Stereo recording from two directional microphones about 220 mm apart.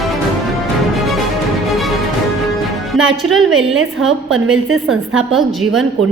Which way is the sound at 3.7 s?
65° right (ahead or behind).